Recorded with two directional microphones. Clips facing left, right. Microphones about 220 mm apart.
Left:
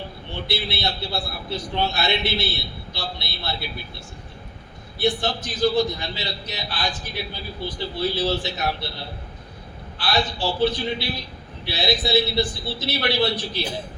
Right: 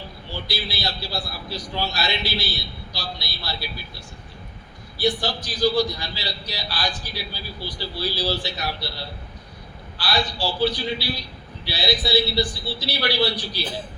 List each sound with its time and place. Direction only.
0.3 s a man's voice: 25° left (ahead or behind)
4.9 s a man's voice: 25° left (ahead or behind)
10.0 s a man's voice: 25° left (ahead or behind)